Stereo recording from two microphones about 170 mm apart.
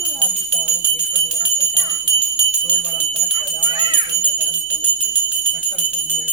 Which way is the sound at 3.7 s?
25° right (ahead or behind).